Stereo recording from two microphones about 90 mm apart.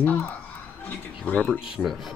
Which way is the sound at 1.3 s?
15° left (ahead or behind).